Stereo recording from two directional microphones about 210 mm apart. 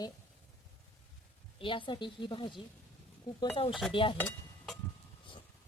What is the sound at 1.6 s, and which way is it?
Speech, 25° left (ahead or behind).